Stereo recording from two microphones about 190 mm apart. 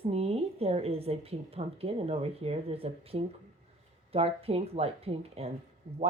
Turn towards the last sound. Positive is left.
turn(degrees=-35)  # may be behind; listen again after turning